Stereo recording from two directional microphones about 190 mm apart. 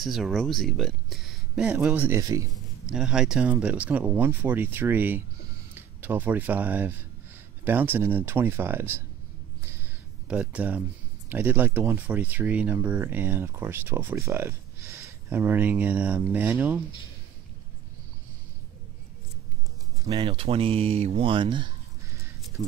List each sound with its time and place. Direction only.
0.0 s speech: centre (ahead or behind); by 2.4 s 15° right (ahead or behind)
2.5 s speech: 5° right (ahead or behind)
9.7 s a sound: 10° right (ahead or behind)
11.2 s speech: 10° right (ahead or behind)
20.1 s speech: 30° right (ahead or behind)